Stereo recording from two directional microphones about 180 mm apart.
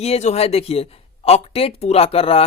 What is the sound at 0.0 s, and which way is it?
Speech, 35° left (ahead or behind).